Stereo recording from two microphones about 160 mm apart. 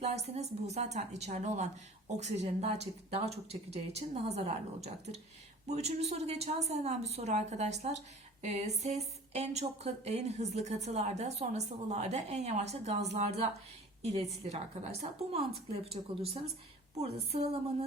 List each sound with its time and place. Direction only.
0.0 s speech: 45° right (ahead or behind)